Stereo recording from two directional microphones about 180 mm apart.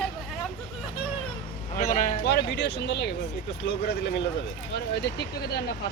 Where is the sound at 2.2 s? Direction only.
65° left (ahead or behind).